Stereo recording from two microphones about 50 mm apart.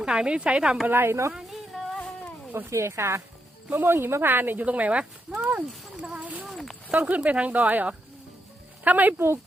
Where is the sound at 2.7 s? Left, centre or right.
Right.